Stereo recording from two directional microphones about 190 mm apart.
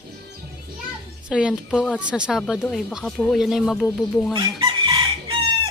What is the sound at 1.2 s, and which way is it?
Speech, 5° right (ahead or behind).